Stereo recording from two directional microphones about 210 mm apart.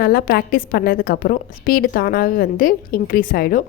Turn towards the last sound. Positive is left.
turn(degrees=40)  # may be behind; listen again after turning